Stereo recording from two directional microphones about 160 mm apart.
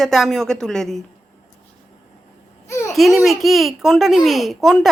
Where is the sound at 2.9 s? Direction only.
Centre (ahead or behind).